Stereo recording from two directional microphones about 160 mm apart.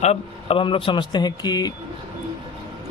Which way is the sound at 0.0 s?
40° left (ahead or behind).